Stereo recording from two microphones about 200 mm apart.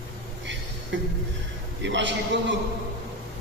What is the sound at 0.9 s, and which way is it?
Music, 65° right (ahead or behind).